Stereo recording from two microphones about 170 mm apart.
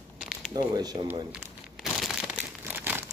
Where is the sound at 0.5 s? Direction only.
25° right (ahead or behind).